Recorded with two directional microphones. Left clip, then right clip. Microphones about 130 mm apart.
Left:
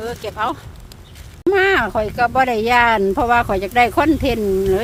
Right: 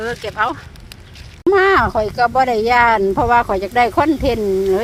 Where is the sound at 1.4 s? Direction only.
15° left (ahead or behind).